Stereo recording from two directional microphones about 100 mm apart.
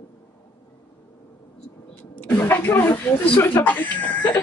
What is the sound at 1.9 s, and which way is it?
Vehicle, 20° left (ahead or behind).